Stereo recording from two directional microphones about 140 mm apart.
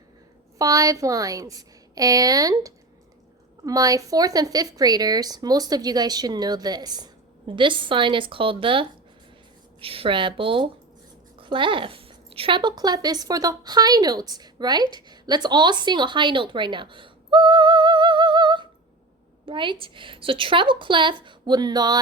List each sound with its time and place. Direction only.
0.6 s a woman's voice: 25° right (ahead or behind)